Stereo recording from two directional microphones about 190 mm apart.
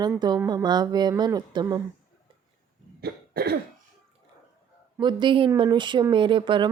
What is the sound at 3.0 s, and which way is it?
Cough, 55° right (ahead or behind).